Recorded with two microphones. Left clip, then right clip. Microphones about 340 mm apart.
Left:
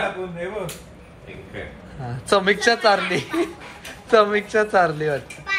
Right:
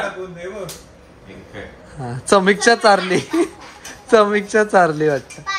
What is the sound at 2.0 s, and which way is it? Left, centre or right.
A woman's voice, right.